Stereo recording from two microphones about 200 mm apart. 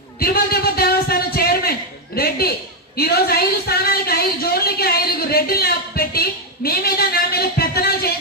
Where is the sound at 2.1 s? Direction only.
50° left (ahead or behind).